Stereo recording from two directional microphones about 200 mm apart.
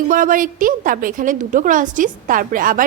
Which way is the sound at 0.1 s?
40° right (ahead or behind).